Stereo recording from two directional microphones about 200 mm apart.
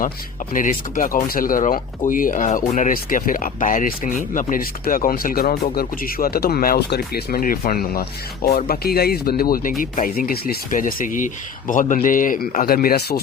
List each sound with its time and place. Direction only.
0.5 s speech: 40° left (ahead or behind)